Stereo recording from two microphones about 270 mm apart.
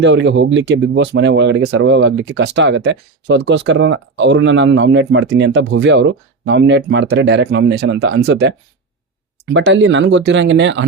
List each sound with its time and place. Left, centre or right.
0.0 s speech: right